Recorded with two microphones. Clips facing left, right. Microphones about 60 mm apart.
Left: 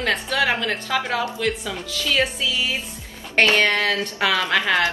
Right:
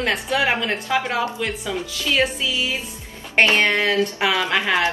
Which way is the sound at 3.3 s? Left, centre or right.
Right.